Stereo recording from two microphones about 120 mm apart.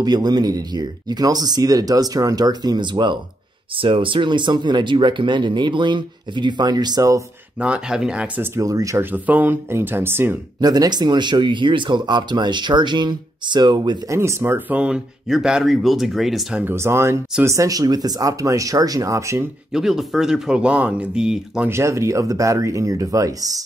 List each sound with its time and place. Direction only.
0.0 s speech: 35° right (ahead or behind)
7.6 s speech: 5° right (ahead or behind)
8.5 s speech: 25° right (ahead or behind)
9.1 s speech: 15° right (ahead or behind)
10.6 s speech: 35° right (ahead or behind)
14.1 s speech: 20° right (ahead or behind); by 16.6 s centre (ahead or behind)
16.6 s speech: 20° right (ahead or behind)
19.7 s speech: 5° right (ahead or behind)
21.6 s speech: 25° right (ahead or behind)